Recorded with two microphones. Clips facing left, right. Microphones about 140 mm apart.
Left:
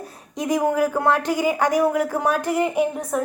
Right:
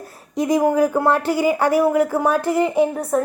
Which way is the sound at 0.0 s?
15° left (ahead or behind).